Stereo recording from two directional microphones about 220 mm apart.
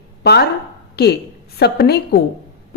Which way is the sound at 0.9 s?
45° left (ahead or behind).